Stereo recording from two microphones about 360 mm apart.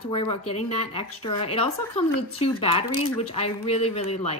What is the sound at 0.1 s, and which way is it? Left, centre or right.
A woman's voice, centre.